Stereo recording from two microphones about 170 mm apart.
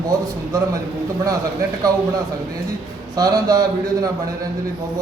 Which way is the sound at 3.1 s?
20° right (ahead or behind).